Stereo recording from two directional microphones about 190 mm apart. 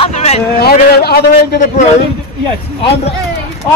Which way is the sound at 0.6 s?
55° left (ahead or behind).